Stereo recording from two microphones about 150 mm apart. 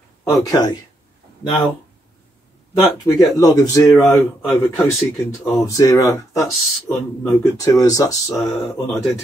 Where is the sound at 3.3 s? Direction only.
25° left (ahead or behind).